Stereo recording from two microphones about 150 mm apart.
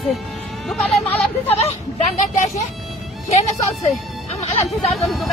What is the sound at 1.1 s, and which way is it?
A woman's voice, 45° left (ahead or behind).